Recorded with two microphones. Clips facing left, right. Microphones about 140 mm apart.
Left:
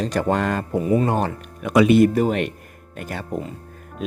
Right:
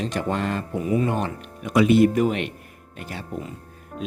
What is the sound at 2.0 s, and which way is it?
Speech, 40° left (ahead or behind).